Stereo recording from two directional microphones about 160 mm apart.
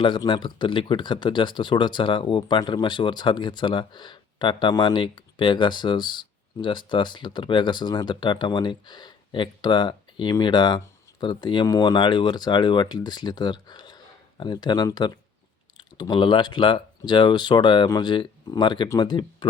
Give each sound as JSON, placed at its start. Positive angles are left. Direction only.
{"t": 0.0, "sound": "speech", "side_deg": 30}